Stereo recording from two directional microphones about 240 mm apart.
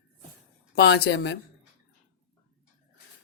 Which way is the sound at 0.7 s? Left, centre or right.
Left.